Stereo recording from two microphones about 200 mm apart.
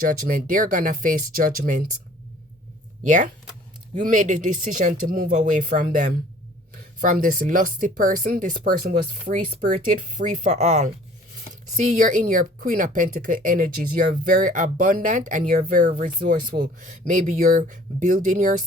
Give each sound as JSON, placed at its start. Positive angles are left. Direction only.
{"t": 0.0, "sound": "speech", "side_deg": -45}
{"t": 3.0, "sound": "speech", "side_deg": -40}
{"t": 11.9, "sound": "speech", "side_deg": -40}